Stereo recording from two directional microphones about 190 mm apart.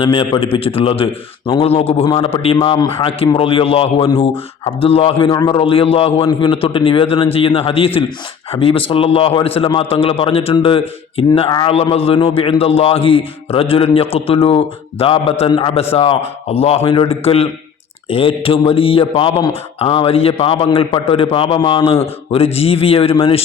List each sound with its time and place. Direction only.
0.0 s a man's voice: 25° left (ahead or behind)